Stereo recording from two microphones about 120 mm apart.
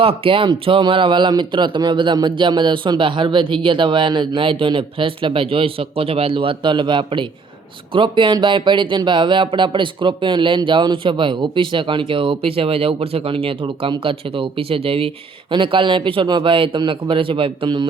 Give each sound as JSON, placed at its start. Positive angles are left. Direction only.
{"t": 0.0, "sound": "speech", "side_deg": -50}